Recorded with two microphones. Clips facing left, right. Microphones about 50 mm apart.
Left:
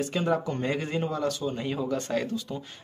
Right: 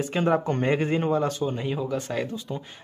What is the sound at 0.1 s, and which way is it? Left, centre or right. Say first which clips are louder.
Speech: right 4 dB; right.